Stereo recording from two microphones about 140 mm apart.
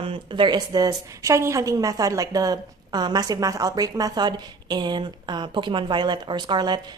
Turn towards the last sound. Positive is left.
turn(degrees=-30)  # may be behind; listen again after turning